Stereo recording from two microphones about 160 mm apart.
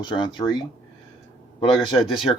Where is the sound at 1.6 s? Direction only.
35° left (ahead or behind).